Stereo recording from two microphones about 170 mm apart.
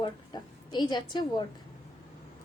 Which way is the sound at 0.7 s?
25° left (ahead or behind).